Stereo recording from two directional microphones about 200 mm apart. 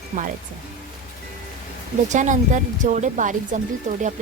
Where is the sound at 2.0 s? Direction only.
40° right (ahead or behind).